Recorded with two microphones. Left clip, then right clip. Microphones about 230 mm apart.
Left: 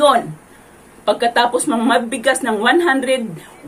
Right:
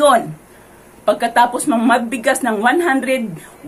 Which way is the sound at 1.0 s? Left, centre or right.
Centre.